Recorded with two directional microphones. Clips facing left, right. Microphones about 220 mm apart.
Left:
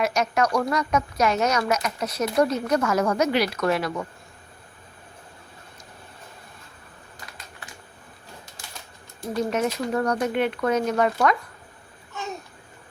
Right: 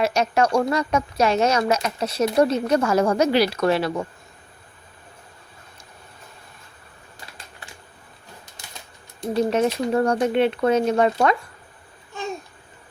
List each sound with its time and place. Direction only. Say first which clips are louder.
0.0 s a woman's voice: right 3 dB; 30° right (ahead or behind)
9.2 s a woman's voice: right 4 dB; 30° right (ahead or behind)